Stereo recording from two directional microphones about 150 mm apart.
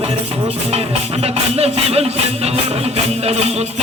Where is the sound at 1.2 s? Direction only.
45° right (ahead or behind).